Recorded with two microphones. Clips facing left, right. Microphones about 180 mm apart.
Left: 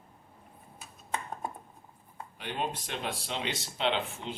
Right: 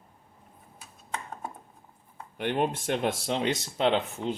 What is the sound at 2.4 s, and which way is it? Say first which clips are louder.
Speech: right 8 dB; 60° right (ahead or behind).